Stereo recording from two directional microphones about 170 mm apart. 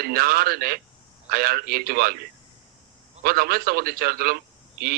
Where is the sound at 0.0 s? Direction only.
65° right (ahead or behind).